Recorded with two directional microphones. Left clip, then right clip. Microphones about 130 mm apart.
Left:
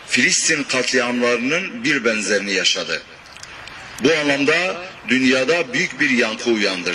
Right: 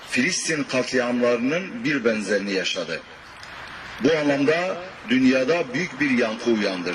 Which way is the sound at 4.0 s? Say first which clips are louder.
Left 3 dB; 20° left (ahead or behind).